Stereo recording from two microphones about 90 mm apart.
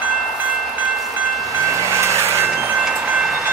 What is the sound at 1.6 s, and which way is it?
Vehicle, 35° right (ahead or behind).